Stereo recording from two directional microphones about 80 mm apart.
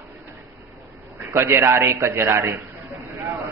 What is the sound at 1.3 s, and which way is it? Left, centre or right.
A man's voice, right.